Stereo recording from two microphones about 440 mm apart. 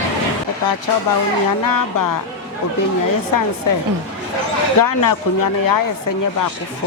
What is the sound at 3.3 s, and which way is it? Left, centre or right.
Speech, left.